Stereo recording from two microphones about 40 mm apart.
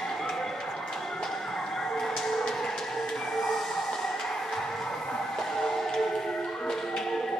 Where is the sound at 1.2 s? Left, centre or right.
Centre.